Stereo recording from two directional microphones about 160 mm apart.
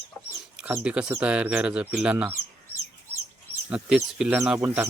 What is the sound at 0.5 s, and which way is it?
Speech, 5° right (ahead or behind).